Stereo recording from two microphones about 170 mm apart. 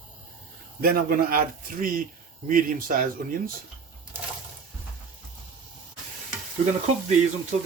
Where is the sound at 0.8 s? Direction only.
60° right (ahead or behind).